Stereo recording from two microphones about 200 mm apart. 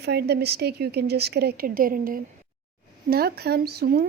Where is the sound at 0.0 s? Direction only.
55° right (ahead or behind).